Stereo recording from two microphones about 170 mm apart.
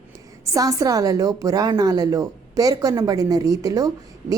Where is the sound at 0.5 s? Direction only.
20° right (ahead or behind).